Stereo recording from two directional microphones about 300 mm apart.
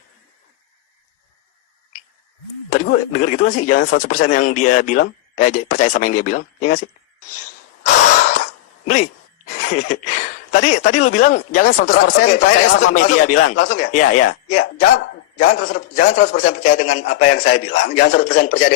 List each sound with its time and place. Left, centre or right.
3.1 s speech: left
8.3 s a sound: left
10.9 s speech: left